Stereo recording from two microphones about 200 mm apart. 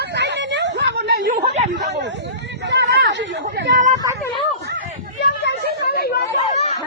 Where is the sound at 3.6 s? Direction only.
40° right (ahead or behind).